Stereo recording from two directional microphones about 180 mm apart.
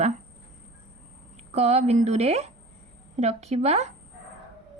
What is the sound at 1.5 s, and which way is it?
A woman's voice, 35° right (ahead or behind).